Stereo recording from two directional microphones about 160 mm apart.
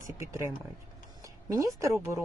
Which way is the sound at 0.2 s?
20° right (ahead or behind).